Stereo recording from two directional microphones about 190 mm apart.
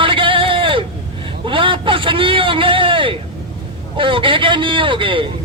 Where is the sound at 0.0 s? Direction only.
25° right (ahead or behind).